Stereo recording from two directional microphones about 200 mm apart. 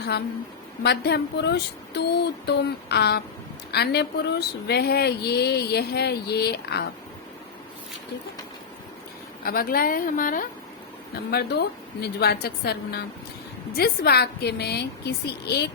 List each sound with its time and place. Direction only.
0.8 s speech: 55° left (ahead or behind)
9.4 s speech: 45° left (ahead or behind)
11.3 s speech: 55° left (ahead or behind)